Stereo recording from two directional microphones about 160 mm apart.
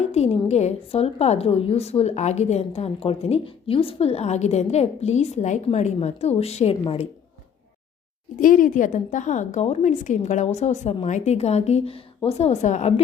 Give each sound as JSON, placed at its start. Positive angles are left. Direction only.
{"t": 0.0, "sound": "a woman's voice", "side_deg": 45}
{"t": 8.4, "sound": "a woman's voice", "side_deg": 60}